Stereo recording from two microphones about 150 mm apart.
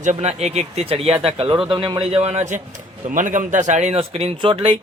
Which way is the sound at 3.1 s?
55° right (ahead or behind).